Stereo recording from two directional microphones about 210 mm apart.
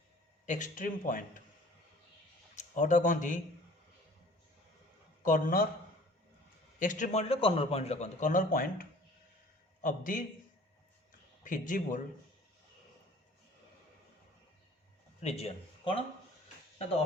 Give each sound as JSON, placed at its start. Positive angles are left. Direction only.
{"t": 0.4, "sound": "a man's voice", "side_deg": 35}
{"t": 2.6, "sound": "a man's voice", "side_deg": 35}
{"t": 5.2, "sound": "a man's voice", "side_deg": 40}
{"t": 6.7, "sound": "a man's voice", "side_deg": 35}
{"t": 11.4, "sound": "a man's voice", "side_deg": 40}
{"t": 15.2, "sound": "a man's voice", "side_deg": 30}